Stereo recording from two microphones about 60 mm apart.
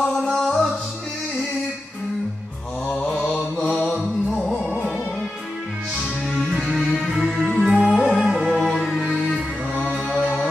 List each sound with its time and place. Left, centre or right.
0.2 s music: centre
3.3 s mantra: centre
4.3 s music: centre
6.5 s music: centre
10.2 s music: centre